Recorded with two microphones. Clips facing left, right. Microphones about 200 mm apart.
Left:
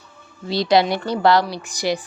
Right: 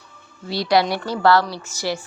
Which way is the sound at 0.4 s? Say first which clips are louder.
Left 2 dB; 20° left (ahead or behind).